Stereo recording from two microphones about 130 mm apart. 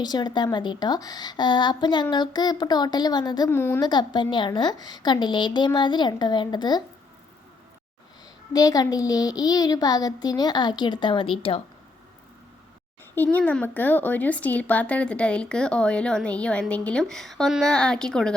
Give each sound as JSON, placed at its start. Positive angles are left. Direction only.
{"t": 0.0, "sound": "a woman's voice", "side_deg": 30}
{"t": 3.5, "sound": "a woman's voice", "side_deg": 20}
{"t": 3.8, "sound": "a woman's voice", "side_deg": 35}
{"t": 8.5, "sound": "a woman's voice", "side_deg": 30}
{"t": 13.1, "sound": "speech", "side_deg": 10}